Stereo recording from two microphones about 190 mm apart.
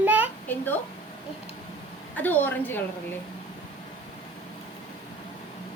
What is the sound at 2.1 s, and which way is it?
Speech, 10° left (ahead or behind).